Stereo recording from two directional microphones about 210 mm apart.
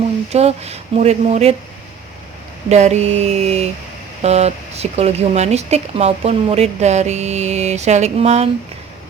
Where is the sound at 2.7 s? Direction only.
35° right (ahead or behind).